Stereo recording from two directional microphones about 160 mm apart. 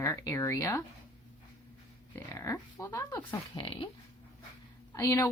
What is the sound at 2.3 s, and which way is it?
Speech, 15° left (ahead or behind).